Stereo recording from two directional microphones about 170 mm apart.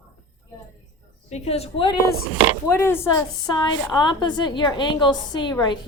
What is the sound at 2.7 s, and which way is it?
Speech, 15° left (ahead or behind).